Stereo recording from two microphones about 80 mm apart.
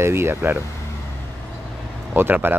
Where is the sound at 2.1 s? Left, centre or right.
Right.